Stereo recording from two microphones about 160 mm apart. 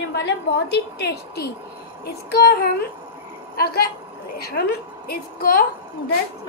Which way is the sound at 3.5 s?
75° left (ahead or behind).